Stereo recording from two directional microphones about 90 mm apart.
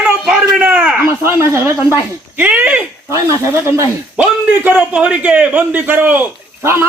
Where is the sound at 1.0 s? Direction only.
25° right (ahead or behind).